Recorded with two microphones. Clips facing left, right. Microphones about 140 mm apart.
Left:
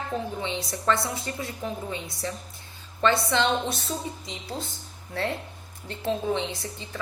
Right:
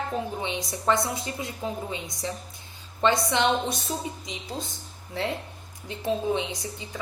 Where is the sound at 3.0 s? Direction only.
15° right (ahead or behind).